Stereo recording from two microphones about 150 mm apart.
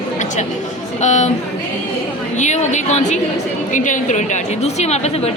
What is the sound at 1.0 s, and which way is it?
Speech, 50° left (ahead or behind).